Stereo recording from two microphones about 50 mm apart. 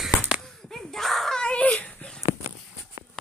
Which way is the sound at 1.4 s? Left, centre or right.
Centre.